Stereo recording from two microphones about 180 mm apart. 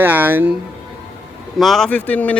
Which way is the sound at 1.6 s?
Centre (ahead or behind).